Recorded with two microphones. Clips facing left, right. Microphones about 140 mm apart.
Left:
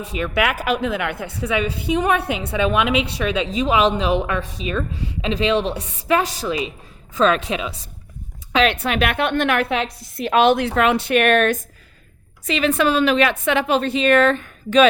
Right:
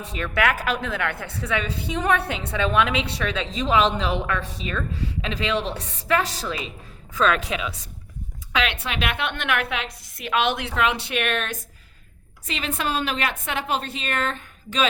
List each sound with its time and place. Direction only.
0.0 s a woman's voice: 10° left (ahead or behind)
7.1 s speech: 25° left (ahead or behind)
8.5 s a woman's voice: 40° left (ahead or behind)
12.5 s a woman's voice: 80° left